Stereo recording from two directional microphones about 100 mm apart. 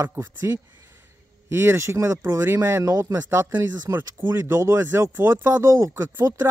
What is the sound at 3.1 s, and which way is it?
Speech, 25° right (ahead or behind).